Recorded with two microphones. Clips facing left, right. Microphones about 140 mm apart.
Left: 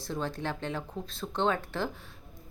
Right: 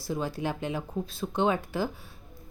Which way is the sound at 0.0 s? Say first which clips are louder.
Right 3 dB; 10° right (ahead or behind).